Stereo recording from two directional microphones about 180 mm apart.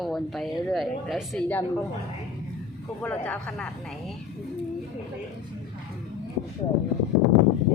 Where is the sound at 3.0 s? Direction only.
10° left (ahead or behind).